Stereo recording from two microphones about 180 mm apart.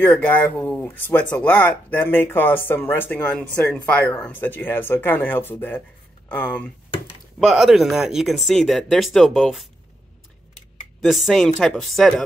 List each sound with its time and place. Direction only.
0.0 s speech: 10° left (ahead or behind)
11.0 s speech: centre (ahead or behind)